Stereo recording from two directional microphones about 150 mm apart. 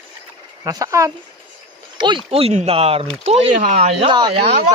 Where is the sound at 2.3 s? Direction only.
45° right (ahead or behind).